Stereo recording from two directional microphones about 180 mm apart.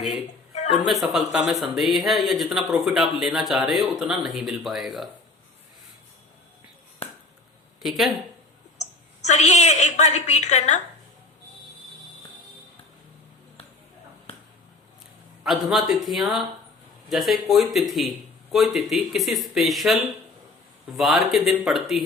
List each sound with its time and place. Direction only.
0.5 s a sound: 40° left (ahead or behind)
0.9 s speech: centre (ahead or behind)
7.8 s speech: centre (ahead or behind)
8.8 s a woman's voice: 40° left (ahead or behind)
15.4 s speech: centre (ahead or behind)